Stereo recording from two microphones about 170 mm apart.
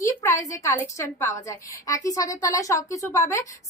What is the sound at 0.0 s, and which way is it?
A woman's voice, 15° left (ahead or behind).